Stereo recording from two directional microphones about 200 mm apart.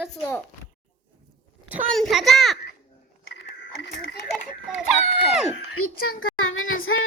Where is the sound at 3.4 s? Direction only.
55° left (ahead or behind).